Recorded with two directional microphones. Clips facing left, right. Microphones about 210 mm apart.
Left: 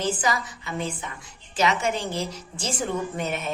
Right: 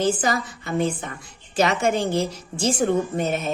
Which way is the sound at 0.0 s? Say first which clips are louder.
Right 4 dB; 50° right (ahead or behind).